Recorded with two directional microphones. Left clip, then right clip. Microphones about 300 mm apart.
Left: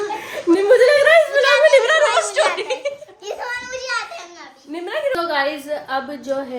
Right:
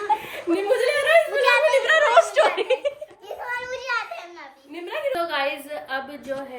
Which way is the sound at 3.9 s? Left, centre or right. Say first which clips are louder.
Left 2 dB; centre.